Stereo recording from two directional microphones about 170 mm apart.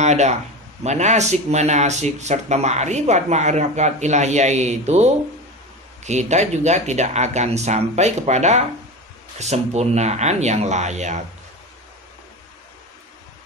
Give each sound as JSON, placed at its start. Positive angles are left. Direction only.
{"t": 0.0, "sound": "a man's voice", "side_deg": -40}